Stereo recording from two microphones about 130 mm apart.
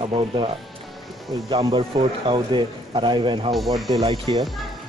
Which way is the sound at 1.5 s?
40° right (ahead or behind).